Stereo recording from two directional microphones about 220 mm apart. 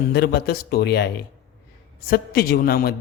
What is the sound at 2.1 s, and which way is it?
Speech, 45° left (ahead or behind).